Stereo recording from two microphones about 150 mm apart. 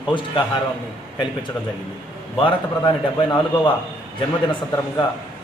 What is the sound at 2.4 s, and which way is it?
A man's voice, 30° left (ahead or behind).